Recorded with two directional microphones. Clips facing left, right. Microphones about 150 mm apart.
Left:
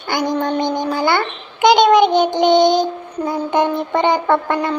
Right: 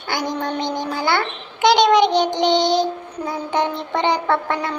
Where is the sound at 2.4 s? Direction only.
50° left (ahead or behind).